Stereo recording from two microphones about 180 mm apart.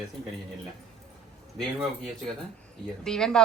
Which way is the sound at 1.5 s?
Centre (ahead or behind).